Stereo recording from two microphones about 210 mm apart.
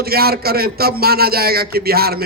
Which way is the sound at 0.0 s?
45° right (ahead or behind).